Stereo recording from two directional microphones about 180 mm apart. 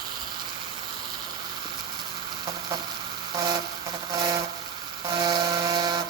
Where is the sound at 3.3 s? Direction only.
20° right (ahead or behind).